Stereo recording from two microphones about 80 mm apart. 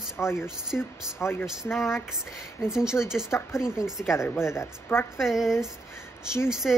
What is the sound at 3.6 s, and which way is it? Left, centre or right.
Speech, centre.